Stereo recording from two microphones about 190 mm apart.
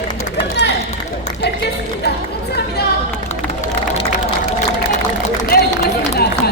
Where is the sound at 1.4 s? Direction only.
60° left (ahead or behind).